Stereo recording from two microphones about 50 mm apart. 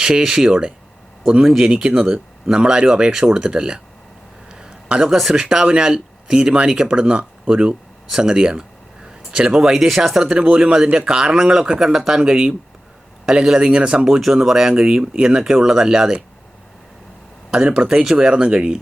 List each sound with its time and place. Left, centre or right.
0.0 s speech: centre
4.5 s a sound: centre
5.1 s speech: centre
9.6 s speech: centre
17.5 s speech: centre